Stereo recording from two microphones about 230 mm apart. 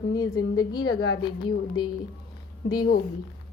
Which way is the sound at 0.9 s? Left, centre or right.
Left.